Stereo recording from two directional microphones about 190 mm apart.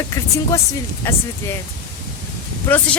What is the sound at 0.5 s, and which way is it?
Speech, 15° left (ahead or behind).